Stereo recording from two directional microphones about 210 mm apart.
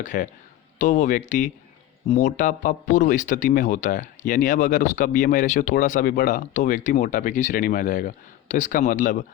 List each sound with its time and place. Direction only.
0.0 s speech: 40° left (ahead or behind)